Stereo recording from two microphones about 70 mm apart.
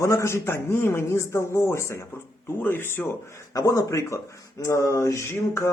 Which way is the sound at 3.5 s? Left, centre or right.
Left.